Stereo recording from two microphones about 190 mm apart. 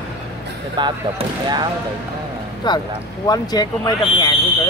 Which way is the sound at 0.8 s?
25° right (ahead or behind).